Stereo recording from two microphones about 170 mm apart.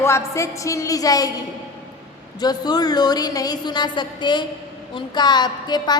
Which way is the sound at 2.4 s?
25° left (ahead or behind).